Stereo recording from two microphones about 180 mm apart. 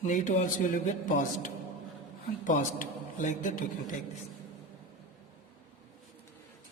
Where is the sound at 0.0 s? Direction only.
45° left (ahead or behind).